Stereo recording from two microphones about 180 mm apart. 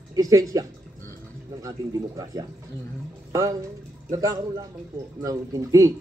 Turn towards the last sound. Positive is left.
turn(degrees=-20)  # may be behind; listen again after turning